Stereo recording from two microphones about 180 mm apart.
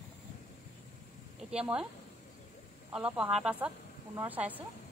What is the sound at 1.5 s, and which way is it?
Speech, 5° right (ahead or behind).